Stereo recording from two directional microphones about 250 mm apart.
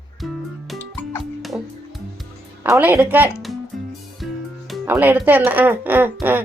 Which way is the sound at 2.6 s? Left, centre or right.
Centre.